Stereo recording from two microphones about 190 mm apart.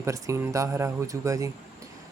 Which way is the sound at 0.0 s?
15° right (ahead or behind).